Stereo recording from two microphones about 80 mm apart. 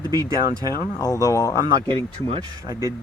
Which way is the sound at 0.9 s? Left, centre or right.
Left.